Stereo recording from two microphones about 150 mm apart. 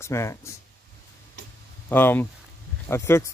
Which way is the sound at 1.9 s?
15° left (ahead or behind).